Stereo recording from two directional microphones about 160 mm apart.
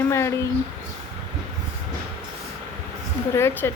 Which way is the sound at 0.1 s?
15° left (ahead or behind).